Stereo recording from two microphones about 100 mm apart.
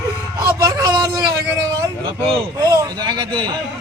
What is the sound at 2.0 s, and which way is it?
Speech, 55° right (ahead or behind).